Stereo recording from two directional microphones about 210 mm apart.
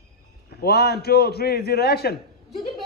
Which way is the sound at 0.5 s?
50° left (ahead or behind).